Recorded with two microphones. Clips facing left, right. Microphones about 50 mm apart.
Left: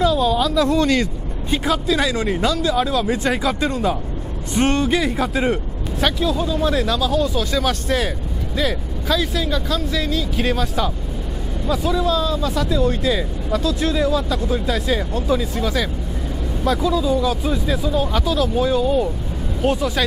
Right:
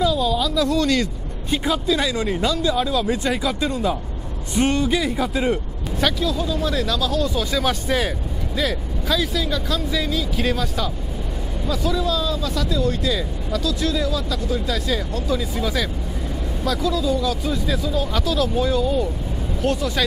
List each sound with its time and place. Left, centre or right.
0.0 s speech: left
2.2 s speech: centre
3.3 s speech: left
4.9 s speech: centre
7.2 s speech: centre
10.3 s speech: centre
15.5 s speech: centre
16.6 s speech: left
18.2 s speech: centre